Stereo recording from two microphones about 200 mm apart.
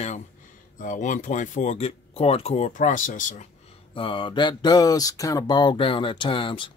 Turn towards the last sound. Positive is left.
turn(degrees=25)  # may be behind; listen again after turning